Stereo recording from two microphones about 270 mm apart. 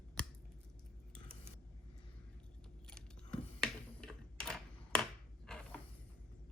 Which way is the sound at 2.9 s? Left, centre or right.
Centre.